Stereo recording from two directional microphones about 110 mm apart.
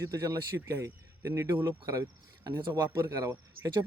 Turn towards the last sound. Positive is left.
turn(degrees=-30)  # may be behind; listen again after turning